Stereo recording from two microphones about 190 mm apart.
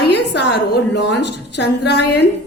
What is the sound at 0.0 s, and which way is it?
A woman's voice, 60° left (ahead or behind).